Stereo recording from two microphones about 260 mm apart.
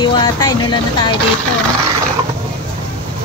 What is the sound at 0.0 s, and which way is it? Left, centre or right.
Speech, centre.